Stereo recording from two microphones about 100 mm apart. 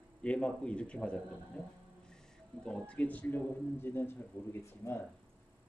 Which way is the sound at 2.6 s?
10° left (ahead or behind).